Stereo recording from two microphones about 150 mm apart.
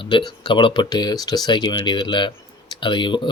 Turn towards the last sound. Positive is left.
turn(degrees=30)  # may be behind; listen again after turning